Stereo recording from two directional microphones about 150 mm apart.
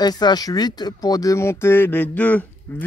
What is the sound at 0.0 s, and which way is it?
Speech, 25° left (ahead or behind).